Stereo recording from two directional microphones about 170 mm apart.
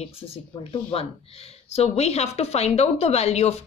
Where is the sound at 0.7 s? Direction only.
35° left (ahead or behind).